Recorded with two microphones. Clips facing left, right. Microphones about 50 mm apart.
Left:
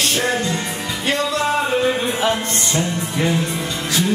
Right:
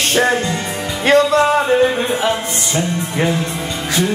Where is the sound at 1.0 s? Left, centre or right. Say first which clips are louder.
Right 9 dB; right.